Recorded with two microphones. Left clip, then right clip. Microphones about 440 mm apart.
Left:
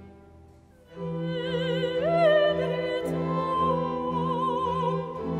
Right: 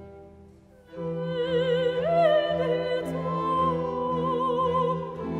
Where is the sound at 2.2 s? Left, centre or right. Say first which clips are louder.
Left 1 dB; left.